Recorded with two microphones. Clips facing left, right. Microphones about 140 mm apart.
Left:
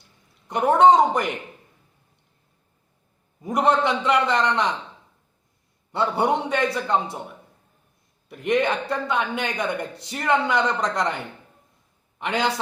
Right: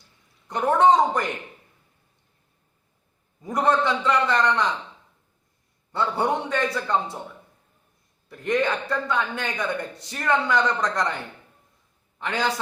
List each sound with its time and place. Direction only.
0.4 s a man's voice: 20° left (ahead or behind)
3.4 s a man's voice: 20° left (ahead or behind)
5.9 s a man's voice: 15° left (ahead or behind)
8.3 s a man's voice: 15° left (ahead or behind)
12.2 s a man's voice: 15° left (ahead or behind)